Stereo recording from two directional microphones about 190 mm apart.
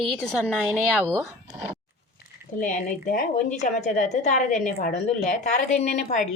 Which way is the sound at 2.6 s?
45° left (ahead or behind).